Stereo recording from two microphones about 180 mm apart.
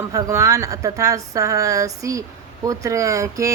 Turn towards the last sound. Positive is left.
turn(degrees=-15)  # may be behind; listen again after turning